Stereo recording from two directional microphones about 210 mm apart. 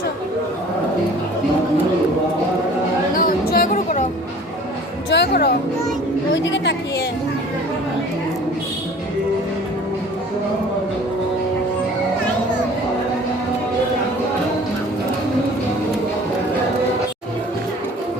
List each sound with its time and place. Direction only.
3.2 s music: 40° left (ahead or behind)
5.0 s music: 55° left (ahead or behind)
6.3 s a woman's voice: 60° left (ahead or behind)